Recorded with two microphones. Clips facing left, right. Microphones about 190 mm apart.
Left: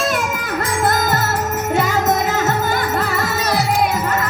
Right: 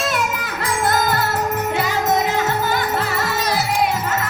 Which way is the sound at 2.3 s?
45° left (ahead or behind).